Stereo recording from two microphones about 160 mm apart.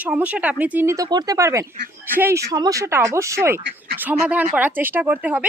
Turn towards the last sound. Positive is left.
turn(degrees=-10)  # may be behind; listen again after turning